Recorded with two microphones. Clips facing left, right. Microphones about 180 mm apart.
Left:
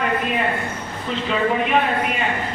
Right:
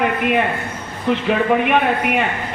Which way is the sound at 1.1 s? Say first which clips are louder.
Right 8 dB; 65° right (ahead or behind).